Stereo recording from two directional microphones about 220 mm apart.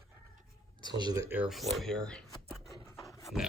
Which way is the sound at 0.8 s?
20° right (ahead or behind).